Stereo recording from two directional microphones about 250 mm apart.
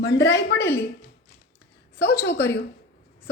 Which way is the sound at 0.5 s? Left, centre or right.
Centre.